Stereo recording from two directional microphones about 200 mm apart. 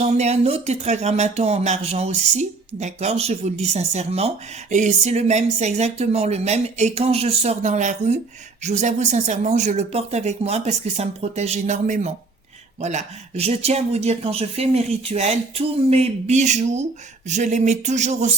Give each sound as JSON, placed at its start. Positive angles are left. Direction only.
{"t": 0.1, "sound": "speech", "side_deg": -30}